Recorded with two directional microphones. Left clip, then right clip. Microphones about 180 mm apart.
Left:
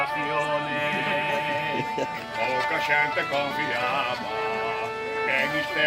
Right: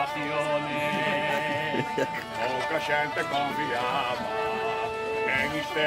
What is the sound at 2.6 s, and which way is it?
Speech, 15° left (ahead or behind).